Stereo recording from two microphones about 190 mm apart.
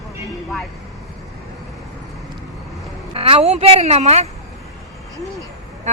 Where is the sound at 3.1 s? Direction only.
30° right (ahead or behind).